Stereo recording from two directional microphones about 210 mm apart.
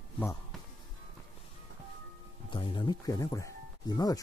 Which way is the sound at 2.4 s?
25° left (ahead or behind).